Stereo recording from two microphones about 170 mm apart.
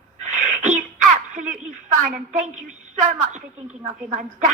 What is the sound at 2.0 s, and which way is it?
Speech, 55° right (ahead or behind).